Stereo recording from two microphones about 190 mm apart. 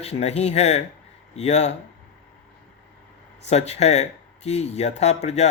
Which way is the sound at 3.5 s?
35° left (ahead or behind).